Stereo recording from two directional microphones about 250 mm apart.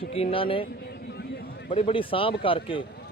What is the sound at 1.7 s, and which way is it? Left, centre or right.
A man's voice, left.